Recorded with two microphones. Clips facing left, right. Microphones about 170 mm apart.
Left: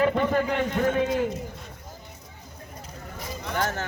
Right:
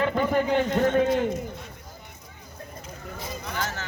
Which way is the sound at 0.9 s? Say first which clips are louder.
Right 3 dB; 55° right (ahead or behind).